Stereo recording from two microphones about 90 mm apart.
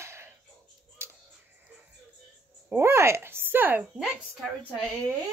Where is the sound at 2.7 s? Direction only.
30° right (ahead or behind).